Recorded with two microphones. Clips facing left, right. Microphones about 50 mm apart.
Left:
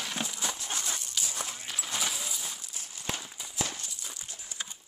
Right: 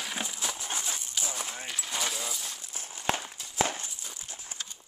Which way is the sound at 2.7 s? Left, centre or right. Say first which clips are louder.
Right 3 dB; right.